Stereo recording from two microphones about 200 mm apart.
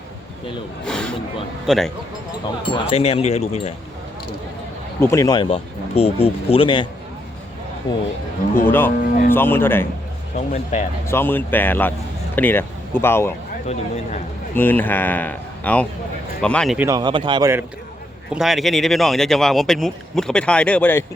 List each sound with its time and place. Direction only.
0.9 s speech: 5° left (ahead or behind)
2.6 s speech: 30° left (ahead or behind)
4.9 s speech: 15° left (ahead or behind)
7.9 s a man's voice: 15° left (ahead or behind)
10.3 s speech: 35° left (ahead or behind)
11.0 s a man's voice: 10° left (ahead or behind)
13.7 s speech: 35° left (ahead or behind)
14.5 s a man's voice: 10° left (ahead or behind)
16.7 s speech: 15° right (ahead or behind)
18.3 s speech: centre (ahead or behind)